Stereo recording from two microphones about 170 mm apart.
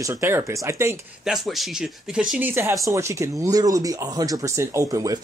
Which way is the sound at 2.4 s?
15° right (ahead or behind).